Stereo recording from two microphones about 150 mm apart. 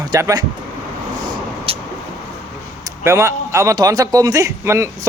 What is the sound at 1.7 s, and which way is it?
Vehicle, 40° right (ahead or behind).